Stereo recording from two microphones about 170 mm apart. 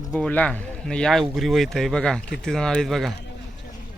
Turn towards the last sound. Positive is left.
turn(degrees=0)  # may be behind; listen again after turning